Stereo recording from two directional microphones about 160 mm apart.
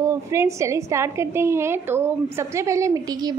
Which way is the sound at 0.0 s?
15° right (ahead or behind).